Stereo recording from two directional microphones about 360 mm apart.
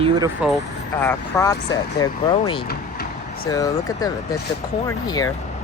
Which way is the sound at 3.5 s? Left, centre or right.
Centre.